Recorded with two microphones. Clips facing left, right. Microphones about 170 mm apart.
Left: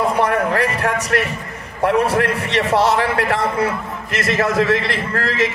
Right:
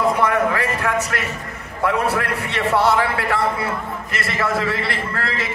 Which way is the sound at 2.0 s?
85° left.